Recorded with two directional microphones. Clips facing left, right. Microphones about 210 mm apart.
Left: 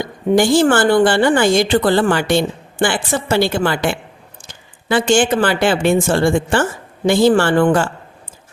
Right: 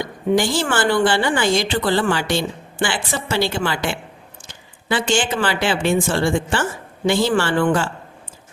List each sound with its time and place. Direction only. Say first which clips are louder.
0.3 s speech: left 8 dB; 50° left (ahead or behind)